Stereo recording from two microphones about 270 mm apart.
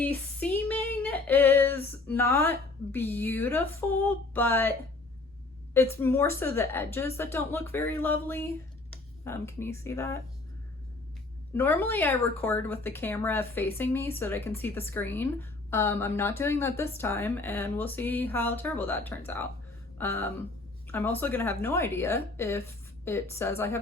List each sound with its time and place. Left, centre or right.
0.0 s female singing: centre
5.7 s speech: centre
11.5 s speech: centre